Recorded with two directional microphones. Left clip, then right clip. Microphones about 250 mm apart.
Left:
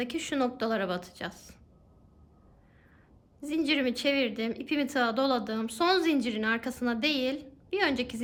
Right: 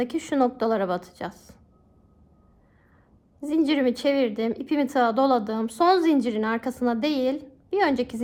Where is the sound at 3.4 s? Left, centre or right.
Centre.